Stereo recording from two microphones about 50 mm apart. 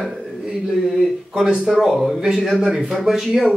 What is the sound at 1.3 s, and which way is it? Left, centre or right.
Speech, centre.